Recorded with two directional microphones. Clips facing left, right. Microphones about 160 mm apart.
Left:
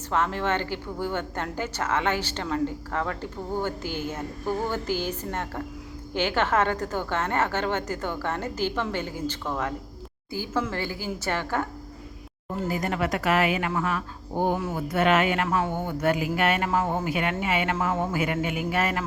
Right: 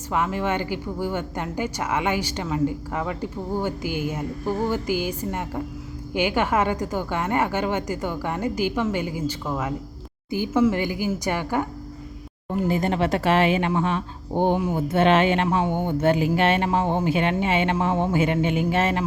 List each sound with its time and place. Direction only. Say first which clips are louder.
0.1 s a woman's voice: right 2 dB; 10° right (ahead or behind)
12.5 s speech: right 5 dB; 25° right (ahead or behind)